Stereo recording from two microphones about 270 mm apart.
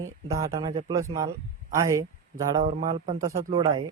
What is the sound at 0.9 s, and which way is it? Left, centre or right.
Speech, centre.